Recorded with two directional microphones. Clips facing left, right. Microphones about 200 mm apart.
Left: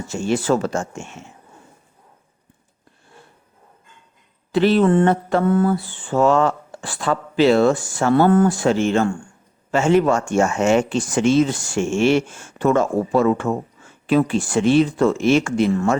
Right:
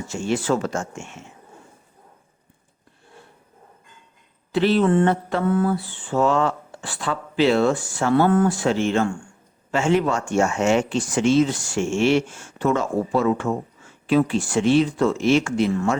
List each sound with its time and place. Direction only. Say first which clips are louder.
0.1 s speech: left 3 dB; 40° left (ahead or behind)
4.5 s mantra: left 3 dB; 50° left (ahead or behind)